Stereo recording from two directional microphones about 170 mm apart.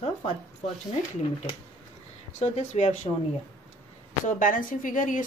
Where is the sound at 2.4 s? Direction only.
45° left (ahead or behind).